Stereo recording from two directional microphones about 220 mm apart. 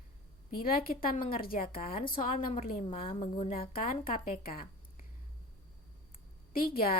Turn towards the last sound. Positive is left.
turn(degrees=40)  # may be behind; listen again after turning